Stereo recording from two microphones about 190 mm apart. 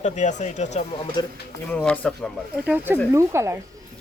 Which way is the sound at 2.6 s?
10° right (ahead or behind).